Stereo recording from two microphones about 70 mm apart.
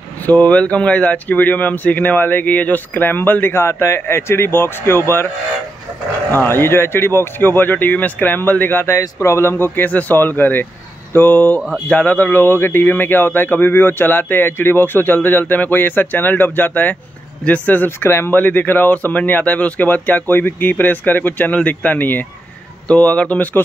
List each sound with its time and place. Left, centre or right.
0.3 s a man's voice: centre
6.3 s a man's voice: left